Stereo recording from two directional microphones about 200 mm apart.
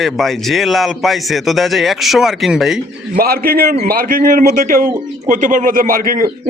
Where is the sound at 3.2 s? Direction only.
50° right (ahead or behind).